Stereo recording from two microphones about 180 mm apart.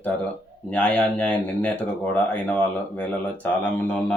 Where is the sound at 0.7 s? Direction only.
10° left (ahead or behind).